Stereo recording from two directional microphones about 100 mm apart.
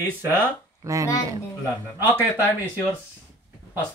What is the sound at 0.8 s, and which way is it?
Speech, 30° right (ahead or behind).